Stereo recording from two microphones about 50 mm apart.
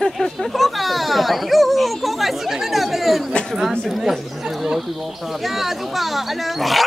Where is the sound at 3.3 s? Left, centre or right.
Centre.